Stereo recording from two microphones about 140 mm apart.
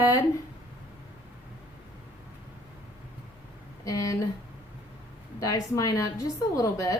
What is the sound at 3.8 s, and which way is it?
Speech, 25° left (ahead or behind).